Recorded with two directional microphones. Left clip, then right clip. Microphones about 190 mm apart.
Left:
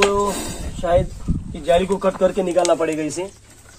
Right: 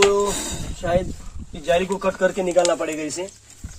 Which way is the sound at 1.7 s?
10° right (ahead or behind).